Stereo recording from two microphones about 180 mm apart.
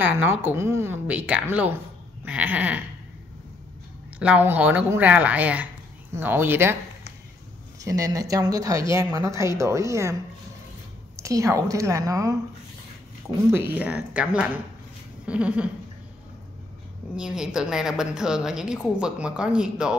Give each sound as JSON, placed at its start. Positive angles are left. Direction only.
{"t": 0.0, "sound": "speech", "side_deg": -10}
{"t": 4.2, "sound": "speech", "side_deg": -10}
{"t": 7.8, "sound": "speech", "side_deg": -20}
{"t": 11.2, "sound": "speech", "side_deg": -15}
{"t": 13.6, "sound": "speech", "side_deg": -10}
{"t": 17.1, "sound": "a woman's voice", "side_deg": -5}